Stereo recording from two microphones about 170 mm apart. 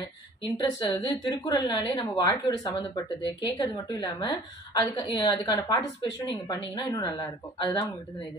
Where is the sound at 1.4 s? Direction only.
25° left (ahead or behind).